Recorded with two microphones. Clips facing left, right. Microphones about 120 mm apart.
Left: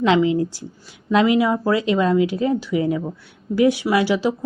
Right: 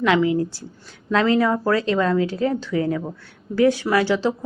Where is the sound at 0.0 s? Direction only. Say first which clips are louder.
Left 2 dB; 20° left (ahead or behind).